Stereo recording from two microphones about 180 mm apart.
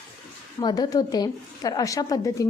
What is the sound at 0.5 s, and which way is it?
A woman's voice, 20° left (ahead or behind).